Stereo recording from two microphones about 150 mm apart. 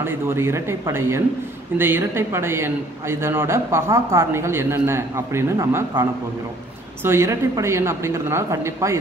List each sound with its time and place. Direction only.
0.0 s a woman's voice: 15° right (ahead or behind)